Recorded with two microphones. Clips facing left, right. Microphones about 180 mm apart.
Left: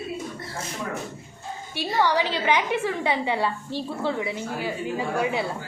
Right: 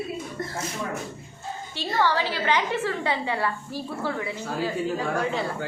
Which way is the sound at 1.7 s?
15° left (ahead or behind).